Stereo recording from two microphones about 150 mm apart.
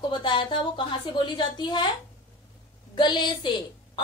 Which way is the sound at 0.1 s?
35° left (ahead or behind).